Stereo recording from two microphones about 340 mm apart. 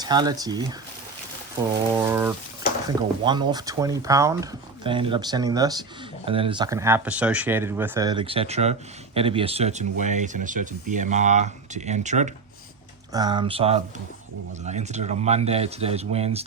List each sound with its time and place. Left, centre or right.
0.0 s speech: centre